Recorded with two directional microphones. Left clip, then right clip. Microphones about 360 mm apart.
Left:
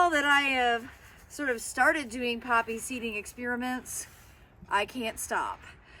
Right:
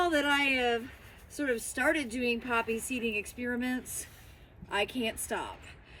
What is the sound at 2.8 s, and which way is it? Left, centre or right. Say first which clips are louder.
Speech: right 2 dB; left.